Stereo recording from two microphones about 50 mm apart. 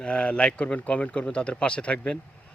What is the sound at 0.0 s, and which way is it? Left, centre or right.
Speech, left.